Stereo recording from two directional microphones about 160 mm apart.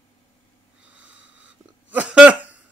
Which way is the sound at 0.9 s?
5° right (ahead or behind).